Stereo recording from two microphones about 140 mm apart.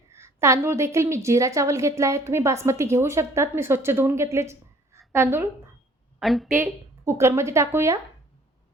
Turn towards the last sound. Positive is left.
turn(degrees=-20)  # may be behind; listen again after turning